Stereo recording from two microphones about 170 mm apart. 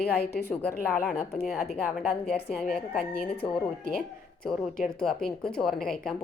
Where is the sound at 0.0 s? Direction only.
70° left (ahead or behind).